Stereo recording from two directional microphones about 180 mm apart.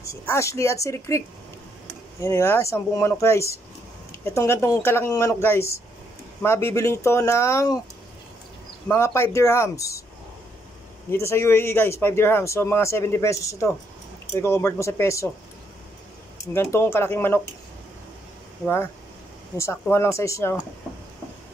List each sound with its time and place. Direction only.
0.0 s a man's voice: 15° left (ahead or behind)
8.8 s a man's voice: 15° left (ahead or behind)
11.1 s a man's voice: 15° left (ahead or behind)
16.5 s a man's voice: 15° left (ahead or behind)
19.5 s a man's voice: 15° left (ahead or behind)